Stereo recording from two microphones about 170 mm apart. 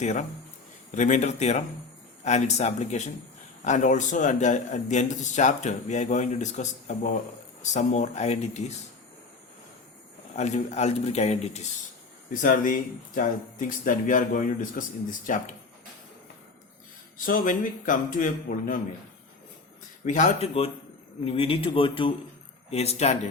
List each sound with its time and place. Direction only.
0.0 s a man's voice: 45° left (ahead or behind)
10.3 s a man's voice: 40° left (ahead or behind)
12.3 s speech: 50° left (ahead or behind)
17.2 s speech: 55° left (ahead or behind)
20.1 s a man's voice: 45° left (ahead or behind)